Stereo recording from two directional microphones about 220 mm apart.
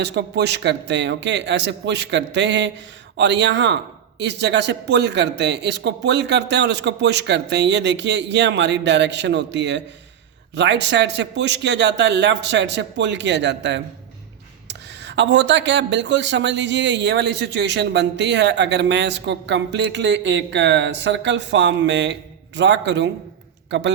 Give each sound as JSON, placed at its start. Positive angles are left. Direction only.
{"t": 0.0, "sound": "speech", "side_deg": -50}